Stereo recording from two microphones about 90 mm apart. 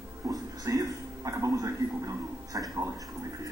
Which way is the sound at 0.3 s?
40° right (ahead or behind).